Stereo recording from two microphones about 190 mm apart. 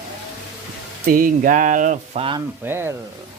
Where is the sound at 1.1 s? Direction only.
45° right (ahead or behind).